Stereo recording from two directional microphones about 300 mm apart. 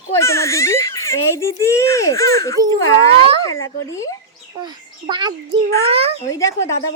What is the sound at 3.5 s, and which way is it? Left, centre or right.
Speech, left.